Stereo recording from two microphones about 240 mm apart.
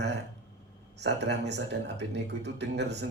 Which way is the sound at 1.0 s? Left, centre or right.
Right.